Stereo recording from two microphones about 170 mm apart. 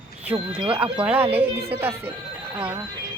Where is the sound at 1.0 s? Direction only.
10° right (ahead or behind).